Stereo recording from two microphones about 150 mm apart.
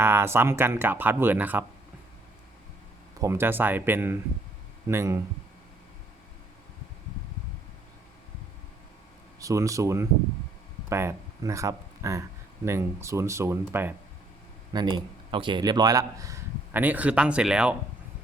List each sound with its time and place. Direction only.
0.0 s speech: 15° right (ahead or behind)
3.2 s speech: 20° right (ahead or behind)
9.4 s speech: 20° right (ahead or behind)
14.7 s speech: 30° right (ahead or behind); by 17.7 s 5° right (ahead or behind)